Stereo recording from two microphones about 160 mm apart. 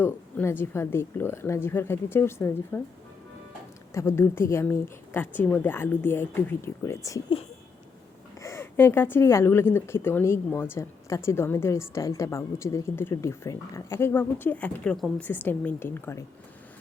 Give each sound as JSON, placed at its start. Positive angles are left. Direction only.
{"t": 0.0, "sound": "speech", "side_deg": 10}
{"t": 3.9, "sound": "speech", "side_deg": 15}
{"t": 8.4, "sound": "speech", "side_deg": 15}